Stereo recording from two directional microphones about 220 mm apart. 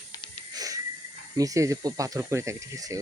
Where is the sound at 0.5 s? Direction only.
15° right (ahead or behind).